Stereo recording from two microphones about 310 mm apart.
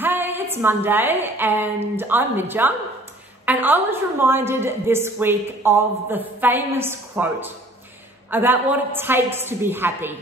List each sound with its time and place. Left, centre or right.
0.0 s a woman's voice: centre